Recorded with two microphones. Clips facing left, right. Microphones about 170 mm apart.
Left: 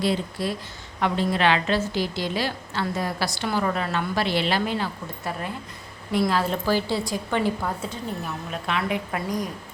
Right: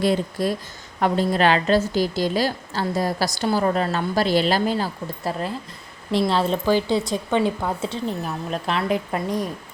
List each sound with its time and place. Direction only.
0.0 s a woman's voice: 45° right (ahead or behind); by 7.9 s 20° right (ahead or behind)
8.6 s a woman's voice: 35° right (ahead or behind)